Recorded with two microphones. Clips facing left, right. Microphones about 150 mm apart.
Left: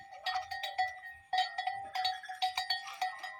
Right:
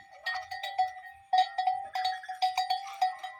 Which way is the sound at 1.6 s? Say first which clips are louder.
Right 6 dB; 35° right (ahead or behind).